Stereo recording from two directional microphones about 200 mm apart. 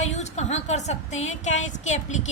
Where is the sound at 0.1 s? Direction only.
35° left (ahead or behind).